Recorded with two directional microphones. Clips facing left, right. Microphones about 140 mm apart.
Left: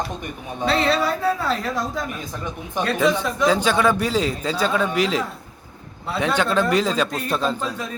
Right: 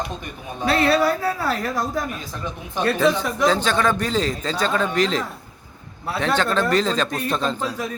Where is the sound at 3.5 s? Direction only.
10° left (ahead or behind).